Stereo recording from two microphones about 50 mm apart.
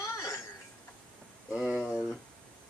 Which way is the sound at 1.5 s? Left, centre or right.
Centre.